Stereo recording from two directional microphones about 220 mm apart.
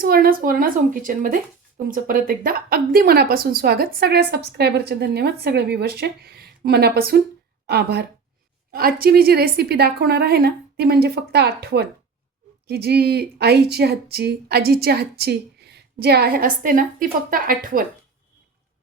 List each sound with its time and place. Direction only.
0.0 s a woman's voice: 40° right (ahead or behind)